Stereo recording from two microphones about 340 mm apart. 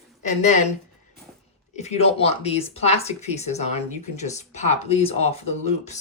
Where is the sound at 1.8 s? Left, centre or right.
Centre.